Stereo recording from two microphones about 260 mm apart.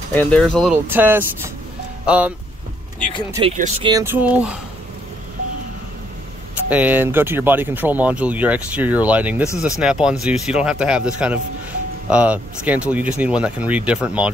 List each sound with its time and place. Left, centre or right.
0.1 s speech: centre
3.3 s speech: right
3.9 s speech: centre
6.7 s speech: centre